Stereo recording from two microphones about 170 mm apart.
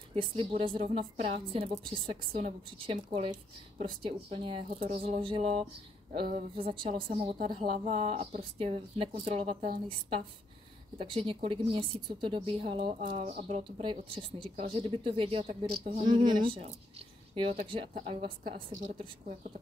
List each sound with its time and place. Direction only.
0.1 s a woman's voice: 35° right (ahead or behind)
13.1 s speech: 55° right (ahead or behind)
13.7 s a woman's voice: 30° right (ahead or behind); by 16.3 s 45° right (ahead or behind)
16.3 s a woman's voice: 30° right (ahead or behind)